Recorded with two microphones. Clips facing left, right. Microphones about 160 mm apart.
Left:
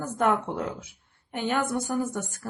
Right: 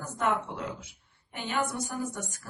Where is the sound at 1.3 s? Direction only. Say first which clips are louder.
Left 5 dB; 50° left (ahead or behind).